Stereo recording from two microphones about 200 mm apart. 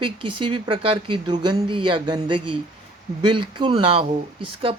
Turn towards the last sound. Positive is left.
turn(degrees=-25)  # may be behind; listen again after turning